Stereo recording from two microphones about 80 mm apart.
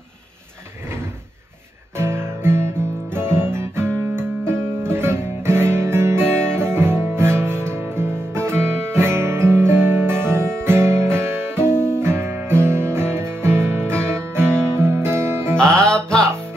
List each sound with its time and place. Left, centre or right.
2.0 s guitar: right
14.1 s music: right
15.5 s music: centre